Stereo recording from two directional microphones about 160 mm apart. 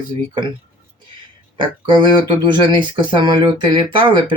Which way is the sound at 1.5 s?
30° right (ahead or behind).